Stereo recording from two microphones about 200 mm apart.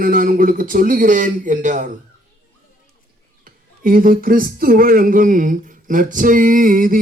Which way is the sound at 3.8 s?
45° right (ahead or behind).